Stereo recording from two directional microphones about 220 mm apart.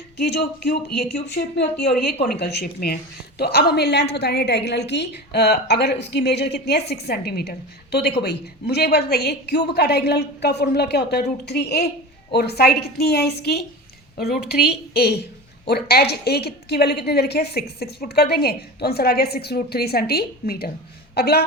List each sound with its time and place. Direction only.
0.2 s a woman's voice: 50° left (ahead or behind)